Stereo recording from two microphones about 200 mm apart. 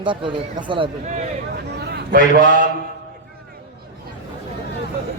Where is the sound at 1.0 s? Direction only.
35° right (ahead or behind).